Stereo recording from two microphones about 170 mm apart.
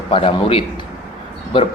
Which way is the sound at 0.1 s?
30° left (ahead or behind).